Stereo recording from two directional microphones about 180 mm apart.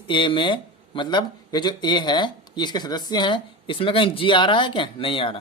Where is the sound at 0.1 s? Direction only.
30° left (ahead or behind).